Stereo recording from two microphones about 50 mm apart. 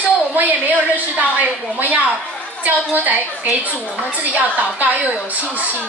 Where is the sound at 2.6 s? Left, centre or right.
Right.